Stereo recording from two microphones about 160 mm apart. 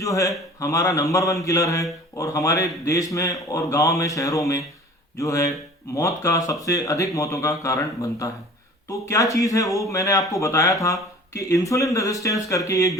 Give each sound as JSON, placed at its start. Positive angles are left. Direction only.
{"t": 0.0, "sound": "speech", "side_deg": 20}